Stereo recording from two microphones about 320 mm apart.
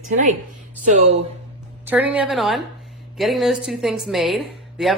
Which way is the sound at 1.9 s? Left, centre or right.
Centre.